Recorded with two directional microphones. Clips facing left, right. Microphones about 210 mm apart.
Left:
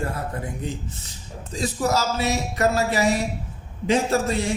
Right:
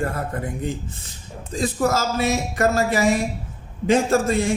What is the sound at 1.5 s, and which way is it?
A man's voice, 55° right (ahead or behind).